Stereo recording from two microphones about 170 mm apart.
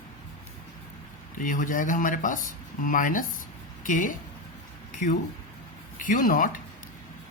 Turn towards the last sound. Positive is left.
turn(degrees=55)  # may be behind; listen again after turning